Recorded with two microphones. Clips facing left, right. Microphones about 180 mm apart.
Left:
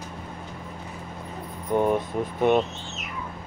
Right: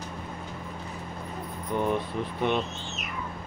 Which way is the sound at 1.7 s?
45° left (ahead or behind).